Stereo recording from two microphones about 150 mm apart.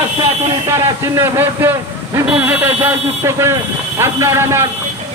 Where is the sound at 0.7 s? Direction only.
20° right (ahead or behind).